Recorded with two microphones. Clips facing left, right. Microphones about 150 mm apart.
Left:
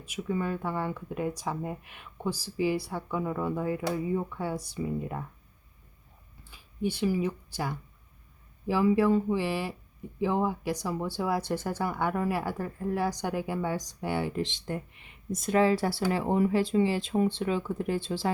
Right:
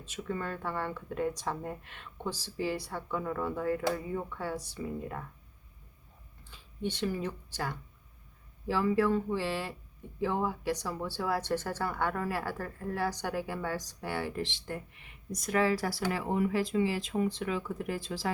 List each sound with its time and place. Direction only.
0.0 s speech: 10° left (ahead or behind)
6.5 s speech: 10° left (ahead or behind); by 18.3 s 25° left (ahead or behind)